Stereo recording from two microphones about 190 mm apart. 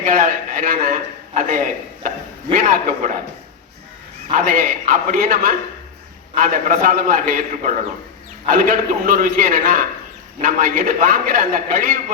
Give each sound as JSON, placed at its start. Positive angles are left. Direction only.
{"t": 0.0, "sound": "a man's voice", "side_deg": -45}
{"t": 4.3, "sound": "a man's voice", "side_deg": -45}